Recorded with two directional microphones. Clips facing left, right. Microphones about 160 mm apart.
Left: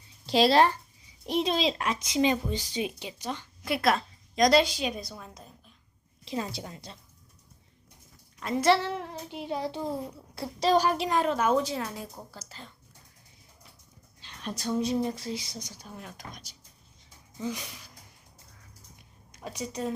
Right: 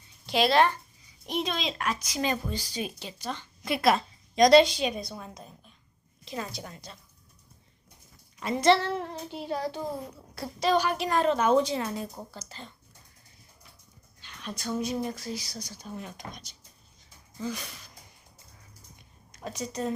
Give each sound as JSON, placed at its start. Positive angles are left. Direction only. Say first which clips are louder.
{"t": 0.3, "sound": "a woman's voice", "louder": "left 2 dB", "side_deg": 35}
{"t": 3.6, "sound": "a woman's voice", "louder": "right 2 dB", "side_deg": 0}
{"t": 6.2, "sound": "a woman's voice", "louder": "left 3 dB", "side_deg": 25}
{"t": 8.4, "sound": "a child's voice", "louder": "right 1 dB", "side_deg": 0}
{"t": 10.6, "sound": "speech", "louder": "left 2 dB", "side_deg": 35}
{"t": 11.1, "sound": "a woman's voice", "louder": "right 4 dB", "side_deg": 10}
{"t": 14.4, "sound": "a woman's voice", "louder": "left 2 dB", "side_deg": 35}
{"t": 17.3, "sound": "a sound", "louder": "even", "side_deg": 15}
{"t": 19.3, "sound": "a woman's voice", "louder": "right 1 dB", "side_deg": 10}